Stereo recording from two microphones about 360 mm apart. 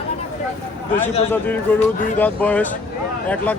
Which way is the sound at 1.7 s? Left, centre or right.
Centre.